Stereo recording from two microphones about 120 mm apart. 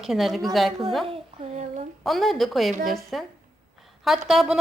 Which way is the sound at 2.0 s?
Centre (ahead or behind).